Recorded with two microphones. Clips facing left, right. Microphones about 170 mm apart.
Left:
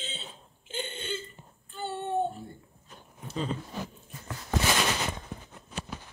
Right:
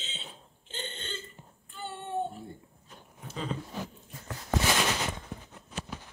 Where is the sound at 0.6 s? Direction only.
10° left (ahead or behind).